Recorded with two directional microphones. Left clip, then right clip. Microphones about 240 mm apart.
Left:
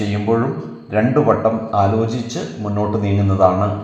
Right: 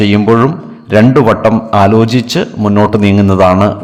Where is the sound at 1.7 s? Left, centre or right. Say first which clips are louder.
Right 9 dB; right.